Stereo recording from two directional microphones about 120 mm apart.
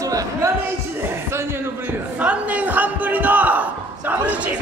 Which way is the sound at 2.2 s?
15° right (ahead or behind).